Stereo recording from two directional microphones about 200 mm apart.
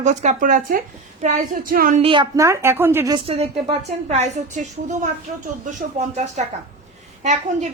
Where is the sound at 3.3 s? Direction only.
30° right (ahead or behind).